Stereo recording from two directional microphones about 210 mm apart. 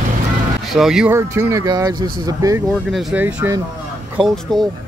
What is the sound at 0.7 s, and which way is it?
Speech, centre (ahead or behind).